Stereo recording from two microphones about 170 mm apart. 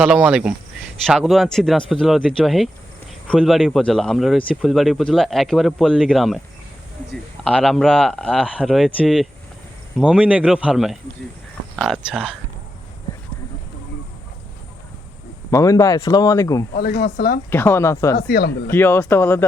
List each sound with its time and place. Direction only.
0.0 s speech: 5° right (ahead or behind)
7.4 s speech: 5° left (ahead or behind)
15.4 s speech: 20° left (ahead or behind)
16.7 s speech: 65° left (ahead or behind)
17.5 s speech: 10° left (ahead or behind)
18.2 s speech: 70° left (ahead or behind)
18.7 s speech: 10° left (ahead or behind)